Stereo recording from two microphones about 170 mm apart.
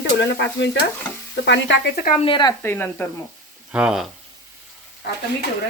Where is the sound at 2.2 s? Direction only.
30° left (ahead or behind).